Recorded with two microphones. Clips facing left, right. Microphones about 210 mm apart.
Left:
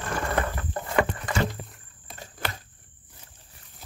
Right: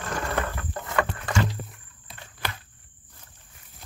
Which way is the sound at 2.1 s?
50° left (ahead or behind).